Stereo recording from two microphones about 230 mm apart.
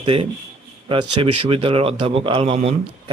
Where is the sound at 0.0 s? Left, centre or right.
Right.